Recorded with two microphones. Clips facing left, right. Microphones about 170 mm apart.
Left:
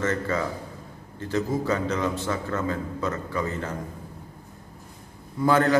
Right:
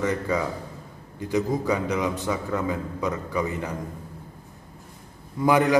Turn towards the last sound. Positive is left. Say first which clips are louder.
# right 1 dB
turn(degrees=-15)  # may be behind; listen again after turning